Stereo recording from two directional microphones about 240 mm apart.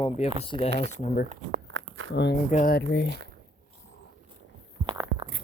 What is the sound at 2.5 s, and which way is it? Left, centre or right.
Speech, left.